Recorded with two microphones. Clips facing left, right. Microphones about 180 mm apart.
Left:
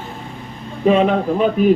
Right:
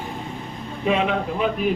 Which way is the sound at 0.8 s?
40° left (ahead or behind).